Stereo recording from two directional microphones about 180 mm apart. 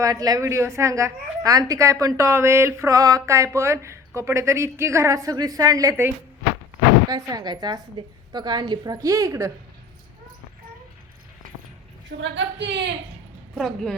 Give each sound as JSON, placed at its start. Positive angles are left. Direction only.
{"t": 0.0, "sound": "a woman's voice", "side_deg": -20}
{"t": 12.2, "sound": "a woman's voice", "side_deg": -85}
{"t": 13.6, "sound": "speech", "side_deg": 0}